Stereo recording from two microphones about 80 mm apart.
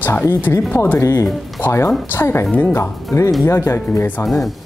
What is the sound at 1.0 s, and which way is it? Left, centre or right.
Speech, left.